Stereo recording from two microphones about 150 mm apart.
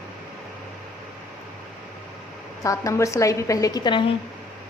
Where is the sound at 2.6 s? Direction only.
20° left (ahead or behind).